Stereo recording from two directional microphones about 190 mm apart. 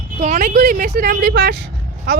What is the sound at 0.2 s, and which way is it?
Speech, 40° right (ahead or behind).